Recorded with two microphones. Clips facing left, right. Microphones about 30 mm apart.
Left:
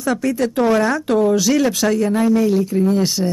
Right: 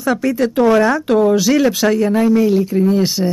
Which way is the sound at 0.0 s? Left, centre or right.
Centre.